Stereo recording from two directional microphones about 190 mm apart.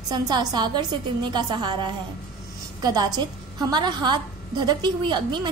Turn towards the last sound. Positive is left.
turn(degrees=-25)  # may be behind; listen again after turning